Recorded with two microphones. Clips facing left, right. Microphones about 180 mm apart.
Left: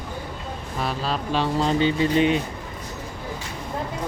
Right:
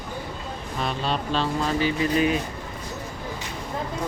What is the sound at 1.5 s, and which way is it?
Speech, 25° left (ahead or behind).